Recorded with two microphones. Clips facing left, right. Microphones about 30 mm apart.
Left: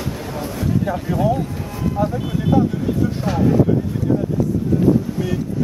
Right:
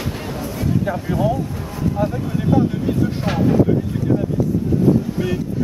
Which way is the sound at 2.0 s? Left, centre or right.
Centre.